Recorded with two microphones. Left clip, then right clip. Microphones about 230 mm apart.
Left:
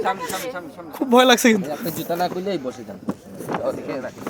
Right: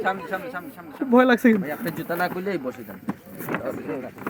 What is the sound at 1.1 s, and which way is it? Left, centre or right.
Speech, centre.